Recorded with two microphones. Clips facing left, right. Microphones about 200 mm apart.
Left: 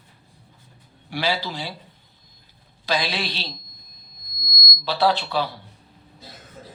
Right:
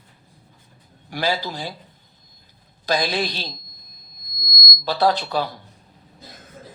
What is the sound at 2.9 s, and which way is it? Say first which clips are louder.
Speech: right 3 dB; 45° right (ahead or behind).